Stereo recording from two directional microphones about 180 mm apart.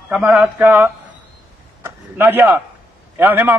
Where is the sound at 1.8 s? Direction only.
10° right (ahead or behind).